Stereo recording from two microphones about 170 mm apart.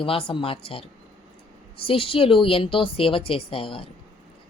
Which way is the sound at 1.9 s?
35° left (ahead or behind).